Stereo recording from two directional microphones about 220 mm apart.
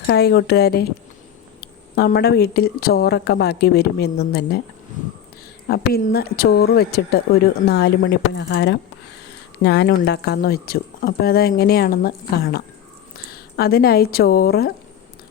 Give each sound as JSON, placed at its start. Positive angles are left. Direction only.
{"t": 0.1, "sound": "a woman's voice", "side_deg": 45}
{"t": 5.6, "sound": "a woman's voice", "side_deg": 45}